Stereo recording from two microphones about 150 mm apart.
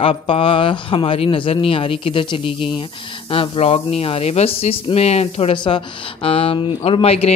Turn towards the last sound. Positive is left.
turn(degrees=40)  # may be behind; listen again after turning